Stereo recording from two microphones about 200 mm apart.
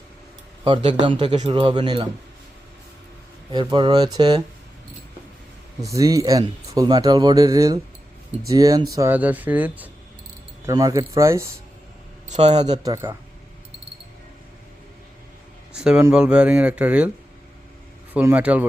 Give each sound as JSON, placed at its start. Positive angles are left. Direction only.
{"t": 0.6, "sound": "a man's voice", "side_deg": -25}
{"t": 3.5, "sound": "a man's voice", "side_deg": -20}
{"t": 5.8, "sound": "speech", "side_deg": -15}
{"t": 12.3, "sound": "a man's voice", "side_deg": -35}
{"t": 12.8, "sound": "speech", "side_deg": -15}
{"t": 15.7, "sound": "speech", "side_deg": -5}
{"t": 18.1, "sound": "speech", "side_deg": -10}